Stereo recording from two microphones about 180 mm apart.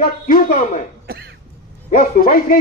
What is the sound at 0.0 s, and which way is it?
Speech, 55° left (ahead or behind).